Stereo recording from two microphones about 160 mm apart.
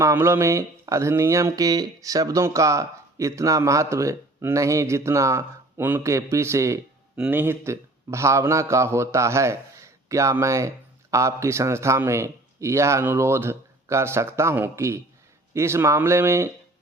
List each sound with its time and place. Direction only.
0.0 s a man's voice: 15° right (ahead or behind)